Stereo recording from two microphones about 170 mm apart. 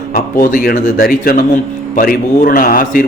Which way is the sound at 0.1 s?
55° left (ahead or behind).